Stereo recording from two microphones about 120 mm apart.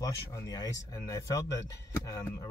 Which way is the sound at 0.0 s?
30° left (ahead or behind).